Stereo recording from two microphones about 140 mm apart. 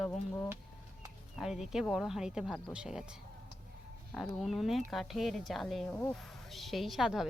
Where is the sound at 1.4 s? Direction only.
5° right (ahead or behind).